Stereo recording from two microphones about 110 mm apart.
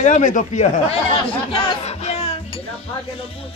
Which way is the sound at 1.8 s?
75° left (ahead or behind).